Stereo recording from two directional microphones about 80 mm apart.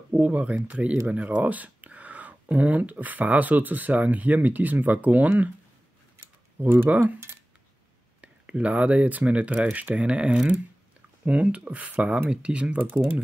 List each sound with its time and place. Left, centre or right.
0.1 s speech: centre
6.6 s speech: right
8.2 s speech: centre